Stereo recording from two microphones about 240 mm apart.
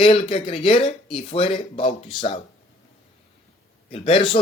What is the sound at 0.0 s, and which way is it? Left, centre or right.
Speech, left.